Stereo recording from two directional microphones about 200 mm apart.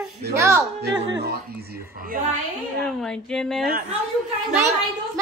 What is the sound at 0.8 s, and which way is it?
Speech, 60° right (ahead or behind).